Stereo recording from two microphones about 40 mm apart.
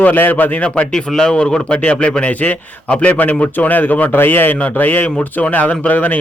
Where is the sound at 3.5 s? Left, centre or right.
Left.